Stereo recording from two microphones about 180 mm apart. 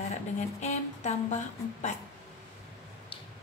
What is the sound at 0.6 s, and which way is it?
Speech, 40° left (ahead or behind).